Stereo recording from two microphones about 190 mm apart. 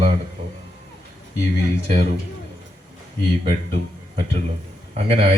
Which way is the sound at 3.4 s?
40° right (ahead or behind).